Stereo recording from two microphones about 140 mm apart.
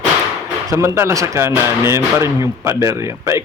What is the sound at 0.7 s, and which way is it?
Speech, 20° right (ahead or behind).